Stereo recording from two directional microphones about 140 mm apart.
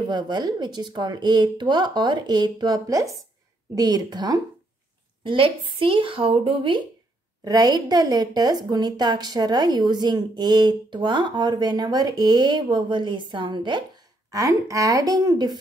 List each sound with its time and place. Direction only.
0.1 s a woman's voice: 30° right (ahead or behind)
7.4 s a woman's voice: 30° right (ahead or behind)
14.3 s a woman's voice: 25° right (ahead or behind)